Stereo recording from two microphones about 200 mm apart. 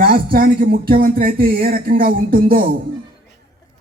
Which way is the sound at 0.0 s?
50° right (ahead or behind).